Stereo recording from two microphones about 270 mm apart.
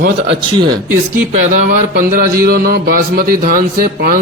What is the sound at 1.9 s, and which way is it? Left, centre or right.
Speech, right.